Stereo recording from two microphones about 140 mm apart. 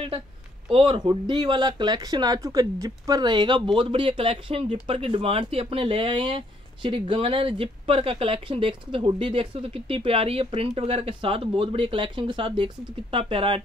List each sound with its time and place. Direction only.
0.7 s speech: 40° right (ahead or behind)